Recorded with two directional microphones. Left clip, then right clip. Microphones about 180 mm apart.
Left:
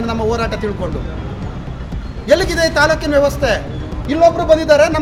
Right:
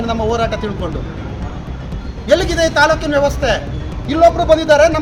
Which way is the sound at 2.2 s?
20° left (ahead or behind).